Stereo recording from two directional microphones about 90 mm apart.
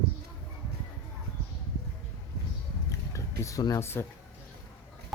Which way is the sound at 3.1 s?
35° left (ahead or behind).